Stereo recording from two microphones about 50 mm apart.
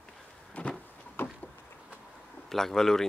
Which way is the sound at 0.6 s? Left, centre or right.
Left.